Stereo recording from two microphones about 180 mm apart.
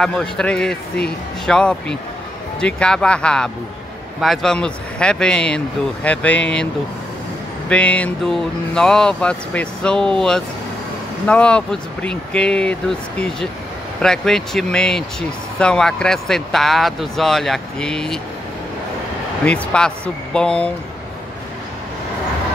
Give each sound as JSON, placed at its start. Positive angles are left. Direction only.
{"t": 0.0, "sound": "speech", "side_deg": 5}
{"t": 7.7, "sound": "speech", "side_deg": 5}
{"t": 19.4, "sound": "speech", "side_deg": 5}